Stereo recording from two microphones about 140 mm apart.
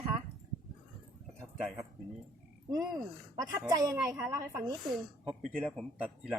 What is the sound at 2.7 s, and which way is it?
Speech, 25° right (ahead or behind).